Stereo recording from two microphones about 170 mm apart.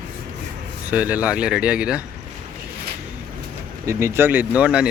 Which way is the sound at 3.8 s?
15° right (ahead or behind).